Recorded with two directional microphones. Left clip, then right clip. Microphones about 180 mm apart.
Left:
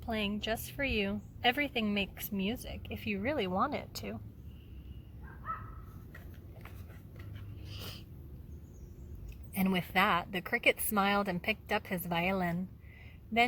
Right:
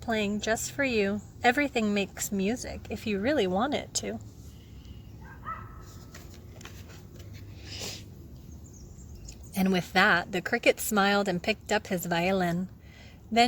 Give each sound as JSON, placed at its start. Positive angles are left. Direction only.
{"t": 0.3, "sound": "speech", "side_deg": -35}
{"t": 7.7, "sound": "a sound", "side_deg": -30}
{"t": 9.6, "sound": "speech", "side_deg": -35}